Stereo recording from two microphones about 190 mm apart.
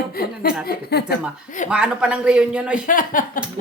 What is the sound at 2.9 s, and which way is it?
Speech, 45° left (ahead or behind).